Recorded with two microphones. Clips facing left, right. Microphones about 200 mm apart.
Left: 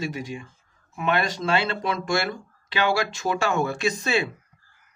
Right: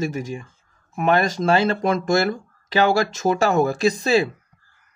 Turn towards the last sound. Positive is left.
turn(degrees=-35)  # may be behind; listen again after turning